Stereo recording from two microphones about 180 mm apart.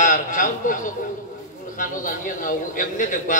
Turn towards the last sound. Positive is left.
turn(degrees=45)  # may be behind; listen again after turning